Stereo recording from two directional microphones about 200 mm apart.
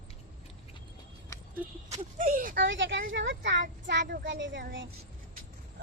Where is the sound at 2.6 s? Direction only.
65° right (ahead or behind).